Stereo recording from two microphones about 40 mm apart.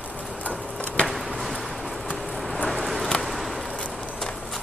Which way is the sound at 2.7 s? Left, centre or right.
Centre.